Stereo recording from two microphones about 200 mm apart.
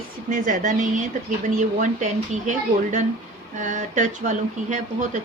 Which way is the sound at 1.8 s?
35° right (ahead or behind).